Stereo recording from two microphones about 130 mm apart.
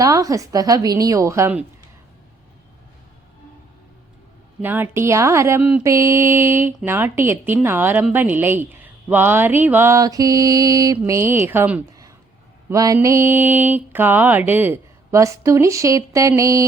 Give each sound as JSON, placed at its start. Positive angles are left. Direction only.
{"t": 0.0, "sound": "mantra", "side_deg": -25}
{"t": 4.6, "sound": "mantra", "side_deg": -15}
{"t": 6.8, "sound": "speech", "side_deg": -20}
{"t": 12.6, "sound": "mantra", "side_deg": -25}